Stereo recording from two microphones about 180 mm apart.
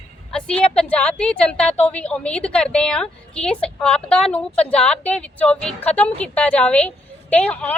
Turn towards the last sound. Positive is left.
turn(degrees=5)  # may be behind; listen again after turning